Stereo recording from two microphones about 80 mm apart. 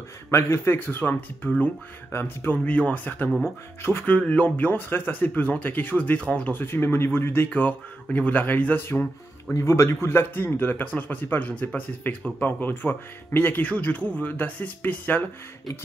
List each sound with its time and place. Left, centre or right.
0.3 s speech: left
3.3 s speech: centre
3.8 s speech: left
6.6 s speech: left
9.5 s speech: left